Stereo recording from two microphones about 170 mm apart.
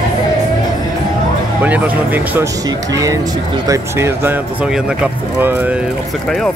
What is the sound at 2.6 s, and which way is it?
Speech, 20° right (ahead or behind).